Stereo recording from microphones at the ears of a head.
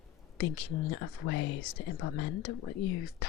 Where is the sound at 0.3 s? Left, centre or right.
Left.